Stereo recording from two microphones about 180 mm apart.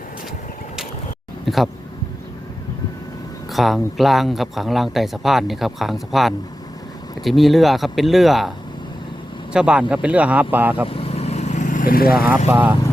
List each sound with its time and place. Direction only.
1.5 s speech: centre (ahead or behind)
3.5 s speech: centre (ahead or behind)
10.8 s vehicle: 30° left (ahead or behind); by 12.1 s 55° left (ahead or behind)
12.1 s speech: 5° right (ahead or behind)